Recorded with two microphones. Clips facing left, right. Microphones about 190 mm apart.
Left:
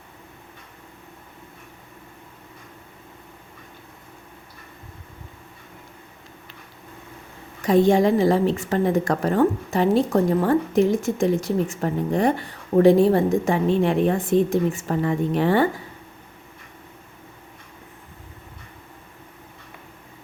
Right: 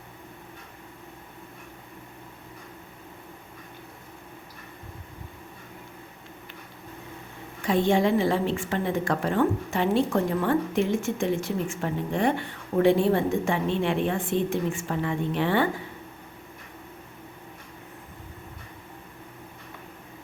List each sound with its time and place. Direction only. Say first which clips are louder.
7.6 s a woman's voice: left 6 dB; 40° left (ahead or behind)